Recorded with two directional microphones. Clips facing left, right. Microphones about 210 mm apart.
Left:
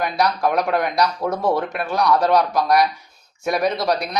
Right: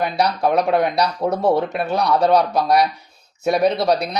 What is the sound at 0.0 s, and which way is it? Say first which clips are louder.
Speech: right 1 dB; 30° right (ahead or behind).